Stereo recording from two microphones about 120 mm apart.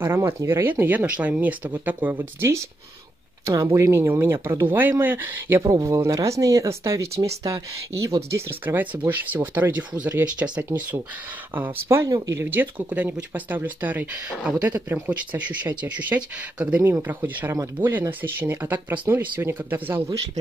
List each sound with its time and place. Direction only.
0.0 s speech: 20° right (ahead or behind)